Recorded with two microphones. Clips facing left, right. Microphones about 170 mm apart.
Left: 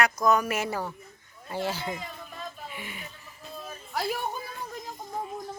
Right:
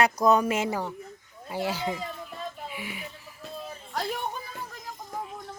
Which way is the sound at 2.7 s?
5° right (ahead or behind).